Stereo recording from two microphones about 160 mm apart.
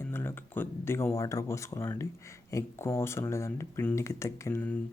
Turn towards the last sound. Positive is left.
turn(degrees=15)  # may be behind; listen again after turning